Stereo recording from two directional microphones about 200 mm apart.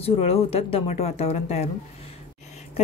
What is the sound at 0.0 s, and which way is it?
Speech, 30° left (ahead or behind).